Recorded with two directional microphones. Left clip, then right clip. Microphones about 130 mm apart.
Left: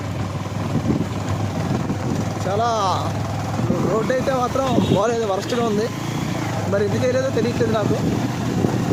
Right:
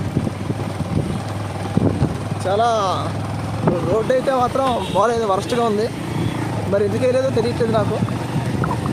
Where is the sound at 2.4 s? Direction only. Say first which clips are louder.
Right 3 dB; 25° right (ahead or behind).